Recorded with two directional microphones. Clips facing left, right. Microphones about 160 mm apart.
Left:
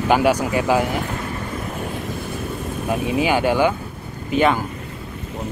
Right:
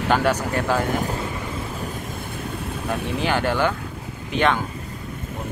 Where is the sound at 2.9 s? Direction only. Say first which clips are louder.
Left 4 dB; 10° left (ahead or behind).